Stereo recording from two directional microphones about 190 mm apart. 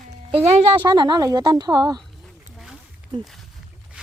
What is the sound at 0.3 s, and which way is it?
Speech, 30° right (ahead or behind).